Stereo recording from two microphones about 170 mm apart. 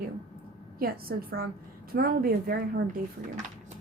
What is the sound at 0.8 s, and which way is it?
A woman's voice, 60° right (ahead or behind).